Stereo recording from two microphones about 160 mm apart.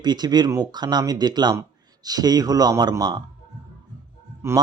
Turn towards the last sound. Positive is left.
turn(degrees=-15)  # may be behind; listen again after turning